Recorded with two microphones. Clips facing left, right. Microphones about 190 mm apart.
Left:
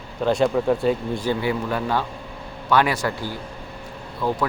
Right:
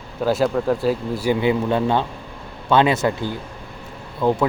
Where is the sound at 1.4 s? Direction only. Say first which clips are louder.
Right 5 dB; 20° right (ahead or behind).